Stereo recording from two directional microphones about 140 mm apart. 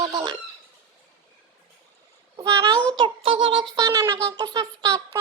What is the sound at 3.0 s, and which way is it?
Speech, 40° right (ahead or behind).